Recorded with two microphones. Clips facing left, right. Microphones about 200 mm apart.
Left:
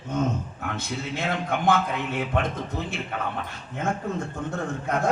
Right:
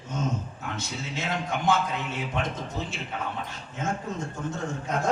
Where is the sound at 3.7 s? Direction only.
60° left (ahead or behind).